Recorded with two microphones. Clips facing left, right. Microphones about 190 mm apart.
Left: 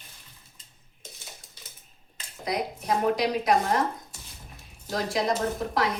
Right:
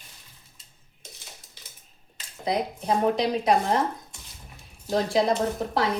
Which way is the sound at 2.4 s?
30° right (ahead or behind).